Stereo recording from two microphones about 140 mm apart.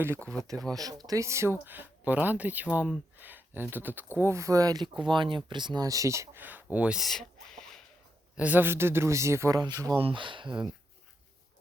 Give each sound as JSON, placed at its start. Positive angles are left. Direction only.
{"t": 0.7, "sound": "speech", "side_deg": -25}
{"t": 8.4, "sound": "speech", "side_deg": -10}